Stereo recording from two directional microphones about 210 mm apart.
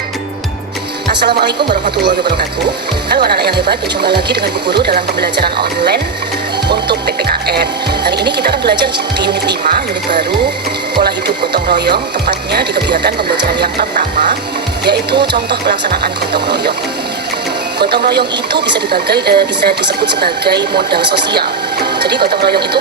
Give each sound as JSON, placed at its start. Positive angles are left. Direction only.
{"t": 1.0, "sound": "speech", "side_deg": -50}
{"t": 3.1, "sound": "speech", "side_deg": -50}
{"t": 11.5, "sound": "speech", "side_deg": -50}
{"t": 13.6, "sound": "music", "side_deg": -45}
{"t": 14.8, "sound": "speech", "side_deg": -50}
{"t": 17.7, "sound": "speech", "side_deg": -50}
{"t": 21.3, "sound": "music", "side_deg": -50}